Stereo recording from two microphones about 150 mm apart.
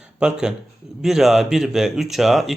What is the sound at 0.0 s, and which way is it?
Speech, 5° right (ahead or behind).